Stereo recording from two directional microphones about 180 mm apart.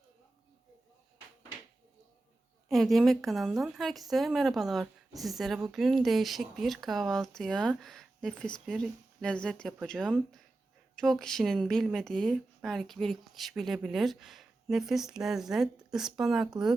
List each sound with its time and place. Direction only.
2.6 s speech: centre (ahead or behind)